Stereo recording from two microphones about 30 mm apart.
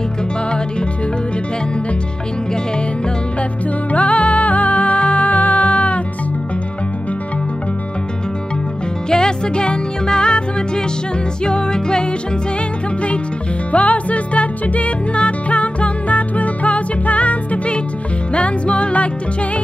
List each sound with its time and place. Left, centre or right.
3.9 s music: left
9.1 s music: left
11.4 s music: left
13.7 s music: left
18.3 s music: left